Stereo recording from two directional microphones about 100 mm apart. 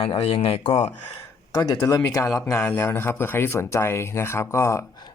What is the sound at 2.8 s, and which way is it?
Speech, 25° left (ahead or behind).